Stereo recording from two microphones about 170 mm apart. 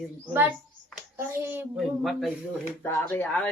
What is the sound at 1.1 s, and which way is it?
Speech, 10° right (ahead or behind).